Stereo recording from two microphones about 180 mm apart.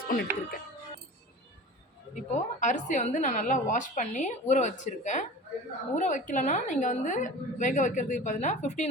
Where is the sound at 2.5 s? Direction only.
45° left (ahead or behind).